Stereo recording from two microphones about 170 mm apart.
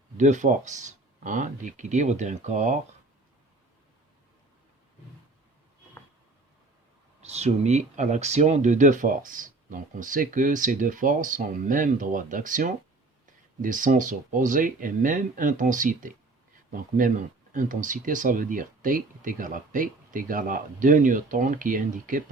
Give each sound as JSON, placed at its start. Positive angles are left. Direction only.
{"t": 0.2, "sound": "speech", "side_deg": -45}
{"t": 7.2, "sound": "speech", "side_deg": -40}